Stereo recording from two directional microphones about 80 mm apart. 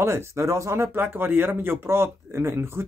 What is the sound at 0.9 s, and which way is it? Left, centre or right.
Speech, right.